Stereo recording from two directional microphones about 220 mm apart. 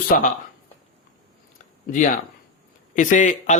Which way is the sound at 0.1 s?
40° left (ahead or behind).